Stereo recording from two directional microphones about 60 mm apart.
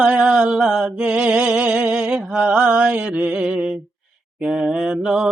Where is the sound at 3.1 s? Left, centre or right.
Centre.